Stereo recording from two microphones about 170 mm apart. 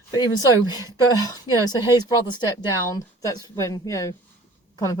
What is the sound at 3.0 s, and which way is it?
A woman's voice, 20° left (ahead or behind).